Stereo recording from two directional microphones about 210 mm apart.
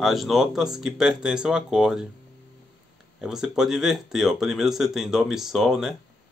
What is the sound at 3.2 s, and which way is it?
Speech, centre (ahead or behind).